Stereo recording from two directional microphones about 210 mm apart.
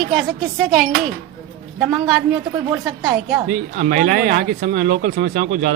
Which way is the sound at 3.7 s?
45° right (ahead or behind).